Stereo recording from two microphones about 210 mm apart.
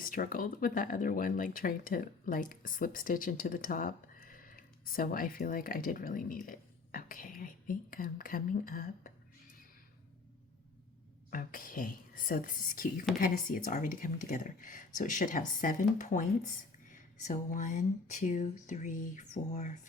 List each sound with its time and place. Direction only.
0.0 s speech: 40° left (ahead or behind)
11.3 s speech: 40° left (ahead or behind)